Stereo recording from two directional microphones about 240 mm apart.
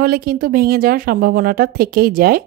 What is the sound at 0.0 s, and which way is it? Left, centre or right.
Speech, right.